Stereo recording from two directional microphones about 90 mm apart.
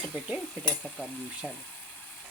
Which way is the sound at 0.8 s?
10° right (ahead or behind).